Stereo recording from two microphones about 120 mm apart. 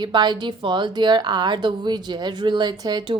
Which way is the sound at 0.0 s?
40° right (ahead or behind).